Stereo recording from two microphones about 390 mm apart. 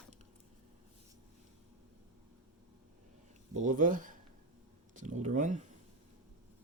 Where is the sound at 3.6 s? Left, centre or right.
Centre.